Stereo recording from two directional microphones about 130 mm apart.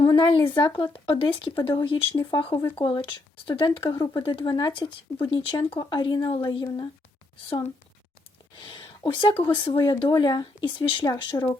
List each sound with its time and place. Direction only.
0.1 s speech: 35° left (ahead or behind)
9.2 s speech: 40° left (ahead or behind)